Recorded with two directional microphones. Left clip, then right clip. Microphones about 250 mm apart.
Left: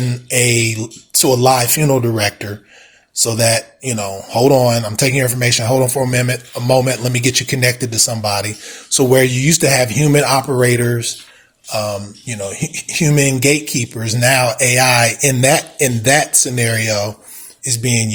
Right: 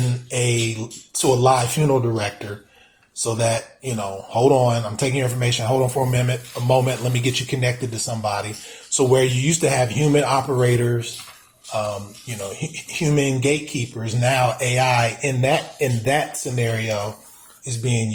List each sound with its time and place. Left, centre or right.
0.3 s speech: left